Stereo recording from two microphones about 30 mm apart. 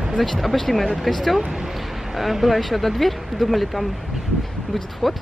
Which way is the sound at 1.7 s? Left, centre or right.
Centre.